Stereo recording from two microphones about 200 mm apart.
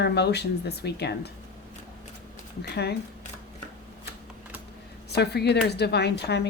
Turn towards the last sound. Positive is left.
turn(degrees=55)  # may be behind; listen again after turning